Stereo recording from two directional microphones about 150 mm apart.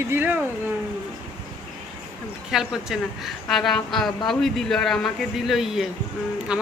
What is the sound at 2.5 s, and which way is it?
A woman's voice, 5° right (ahead or behind).